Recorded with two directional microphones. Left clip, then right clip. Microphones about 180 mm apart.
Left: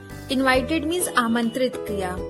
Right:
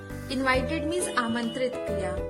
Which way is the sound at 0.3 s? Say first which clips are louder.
Left 5 dB; 35° left (ahead or behind).